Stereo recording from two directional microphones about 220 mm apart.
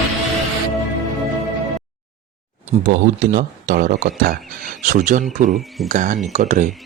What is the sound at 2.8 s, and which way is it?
Speech, 40° right (ahead or behind).